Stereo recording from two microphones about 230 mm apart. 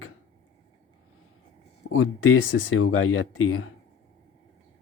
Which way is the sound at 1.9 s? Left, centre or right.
Left.